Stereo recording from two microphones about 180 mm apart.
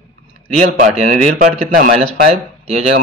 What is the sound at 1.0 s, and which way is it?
Speech, 40° right (ahead or behind).